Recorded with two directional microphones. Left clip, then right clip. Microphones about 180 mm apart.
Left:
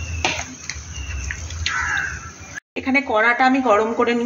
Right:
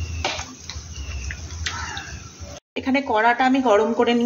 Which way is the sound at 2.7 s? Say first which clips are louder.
Left 2 dB; 15° right (ahead or behind).